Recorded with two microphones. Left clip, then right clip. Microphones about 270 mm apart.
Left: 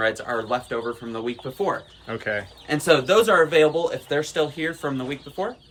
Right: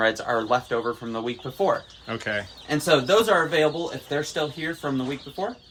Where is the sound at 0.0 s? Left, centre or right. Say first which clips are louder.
Right 1 dB; right.